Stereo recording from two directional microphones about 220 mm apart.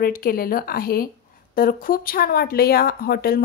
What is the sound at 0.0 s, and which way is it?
Speech, 40° left (ahead or behind).